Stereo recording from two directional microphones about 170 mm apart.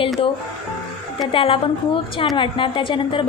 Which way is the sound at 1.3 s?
30° left (ahead or behind).